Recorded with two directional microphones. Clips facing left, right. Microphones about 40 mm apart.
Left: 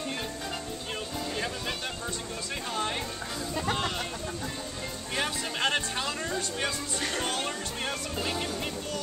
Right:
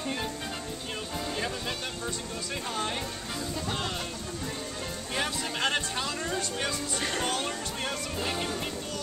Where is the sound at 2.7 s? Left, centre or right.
Centre.